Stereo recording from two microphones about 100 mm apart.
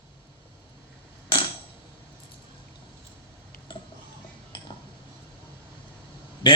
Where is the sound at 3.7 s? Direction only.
55° left (ahead or behind).